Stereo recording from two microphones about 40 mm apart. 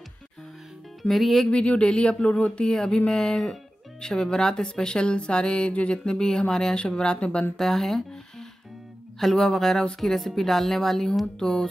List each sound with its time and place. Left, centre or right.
1.0 s speech: centre
1.5 s speech: left
3.1 s a woman's voice: centre
6.0 s a woman's voice: centre
7.5 s a woman's voice: centre